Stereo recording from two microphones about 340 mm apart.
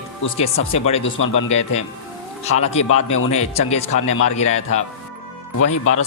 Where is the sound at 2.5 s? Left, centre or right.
Centre.